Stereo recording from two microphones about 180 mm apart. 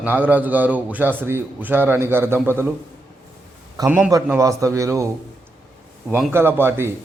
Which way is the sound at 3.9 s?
5° right (ahead or behind).